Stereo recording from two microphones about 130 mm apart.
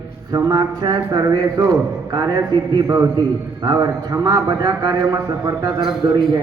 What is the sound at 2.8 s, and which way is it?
Speech, 25° right (ahead or behind).